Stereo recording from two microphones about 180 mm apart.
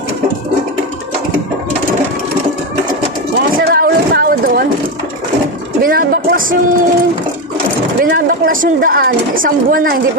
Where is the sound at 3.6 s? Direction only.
55° right (ahead or behind).